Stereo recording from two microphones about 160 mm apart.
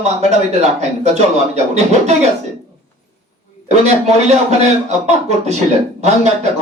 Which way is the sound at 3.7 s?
45° right (ahead or behind).